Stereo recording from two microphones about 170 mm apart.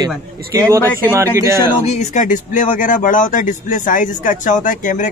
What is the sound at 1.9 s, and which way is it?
Speech, 45° left (ahead or behind).